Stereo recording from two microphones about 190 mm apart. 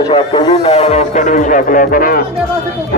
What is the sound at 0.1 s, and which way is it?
Speech, 30° left (ahead or behind).